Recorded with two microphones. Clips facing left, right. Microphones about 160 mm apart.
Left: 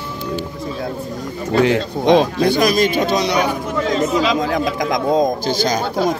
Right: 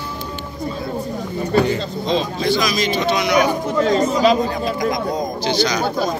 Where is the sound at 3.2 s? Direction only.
35° left (ahead or behind).